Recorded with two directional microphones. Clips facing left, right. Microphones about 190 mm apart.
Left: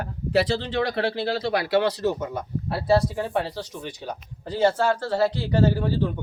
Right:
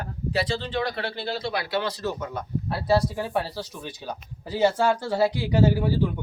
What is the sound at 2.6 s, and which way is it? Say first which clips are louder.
Speech: left 2 dB; centre (ahead or behind).